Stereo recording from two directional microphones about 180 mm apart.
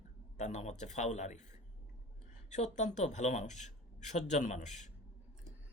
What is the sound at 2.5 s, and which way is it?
Speech, 40° left (ahead or behind).